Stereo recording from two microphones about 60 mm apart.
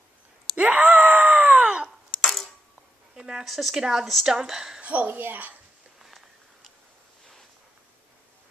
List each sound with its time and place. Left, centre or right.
0.6 s screaming: centre
2.2 s coin: centre
3.2 s a woman's voice: centre
4.8 s speech: right
6.0 s a sound: centre